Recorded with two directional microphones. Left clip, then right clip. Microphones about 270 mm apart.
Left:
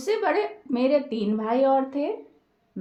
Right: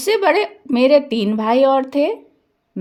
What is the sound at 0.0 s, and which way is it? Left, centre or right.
Speech, right.